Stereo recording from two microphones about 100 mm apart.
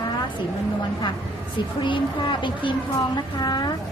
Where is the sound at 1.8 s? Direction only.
50° left (ahead or behind).